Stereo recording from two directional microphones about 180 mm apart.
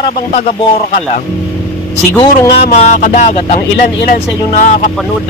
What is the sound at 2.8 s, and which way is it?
Speech, 40° left (ahead or behind).